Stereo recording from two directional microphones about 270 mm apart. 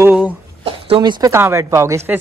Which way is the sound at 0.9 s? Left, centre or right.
Centre.